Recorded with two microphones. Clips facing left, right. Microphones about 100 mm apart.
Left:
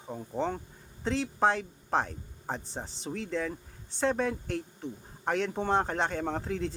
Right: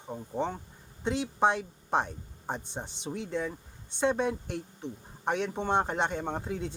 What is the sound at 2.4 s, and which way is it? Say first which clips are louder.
Speech: even; centre (ahead or behind).